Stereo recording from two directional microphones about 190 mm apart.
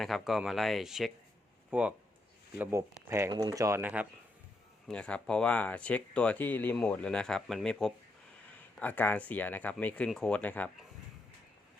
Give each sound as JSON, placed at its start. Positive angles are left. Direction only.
{"t": 0.0, "sound": "speech", "side_deg": 0}
{"t": 4.9, "sound": "speech", "side_deg": 5}